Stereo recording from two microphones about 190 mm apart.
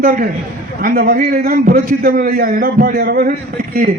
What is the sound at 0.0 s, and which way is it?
A man's voice, 40° right (ahead or behind).